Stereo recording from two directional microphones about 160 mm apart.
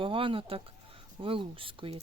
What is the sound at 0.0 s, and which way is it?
Speech, 35° right (ahead or behind).